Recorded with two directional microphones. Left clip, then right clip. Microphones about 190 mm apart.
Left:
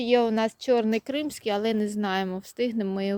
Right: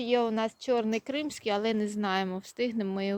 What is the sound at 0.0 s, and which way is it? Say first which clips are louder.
Speech: left 5 dB; 25° left (ahead or behind).